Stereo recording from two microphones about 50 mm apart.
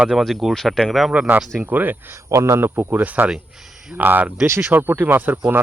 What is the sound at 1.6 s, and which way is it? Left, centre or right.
Speech, right.